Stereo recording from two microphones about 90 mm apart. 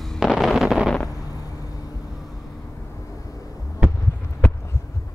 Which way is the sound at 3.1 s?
40° left (ahead or behind).